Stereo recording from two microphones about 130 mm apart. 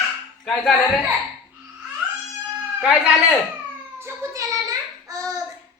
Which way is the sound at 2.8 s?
5° right (ahead or behind).